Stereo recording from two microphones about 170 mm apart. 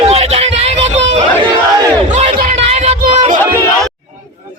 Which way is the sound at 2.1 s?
35° right (ahead or behind).